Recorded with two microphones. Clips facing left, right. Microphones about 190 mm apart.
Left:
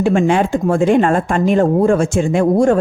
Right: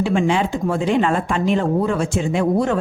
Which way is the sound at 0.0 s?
50° left (ahead or behind).